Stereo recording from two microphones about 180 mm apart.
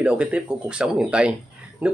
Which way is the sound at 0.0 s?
5° right (ahead or behind).